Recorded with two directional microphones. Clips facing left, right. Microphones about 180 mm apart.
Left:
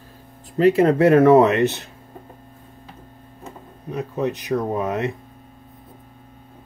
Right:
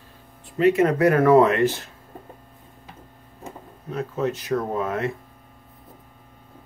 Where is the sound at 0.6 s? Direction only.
35° left (ahead or behind).